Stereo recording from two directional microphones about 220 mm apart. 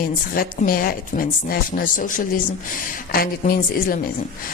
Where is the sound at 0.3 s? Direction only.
40° left (ahead or behind).